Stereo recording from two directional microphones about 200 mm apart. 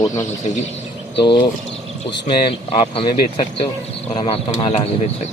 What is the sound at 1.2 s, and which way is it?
Speech, 25° left (ahead or behind).